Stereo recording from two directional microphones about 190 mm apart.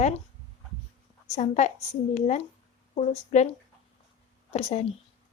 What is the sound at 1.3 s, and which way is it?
A woman's voice, 40° left (ahead or behind).